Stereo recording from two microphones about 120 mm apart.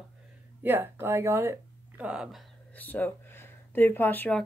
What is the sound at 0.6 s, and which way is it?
Speech, 15° right (ahead or behind).